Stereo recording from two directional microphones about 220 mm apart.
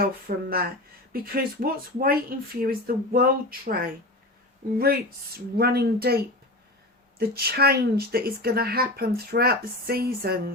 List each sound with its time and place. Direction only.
0.0 s speech: 40° right (ahead or behind)
5.5 s speech: 45° right (ahead or behind)